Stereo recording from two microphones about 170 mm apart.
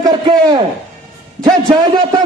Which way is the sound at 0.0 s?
25° right (ahead or behind).